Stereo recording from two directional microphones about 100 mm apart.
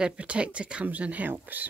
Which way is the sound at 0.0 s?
10° right (ahead or behind).